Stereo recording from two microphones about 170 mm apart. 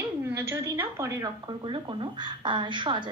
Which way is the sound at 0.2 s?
15° right (ahead or behind).